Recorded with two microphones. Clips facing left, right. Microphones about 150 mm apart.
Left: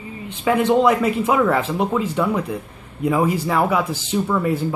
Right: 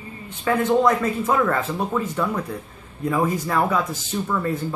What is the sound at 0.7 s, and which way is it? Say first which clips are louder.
Speech: left 2 dB; 15° left (ahead or behind).